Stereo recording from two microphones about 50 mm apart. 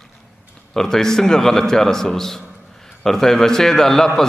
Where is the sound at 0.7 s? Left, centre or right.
Centre.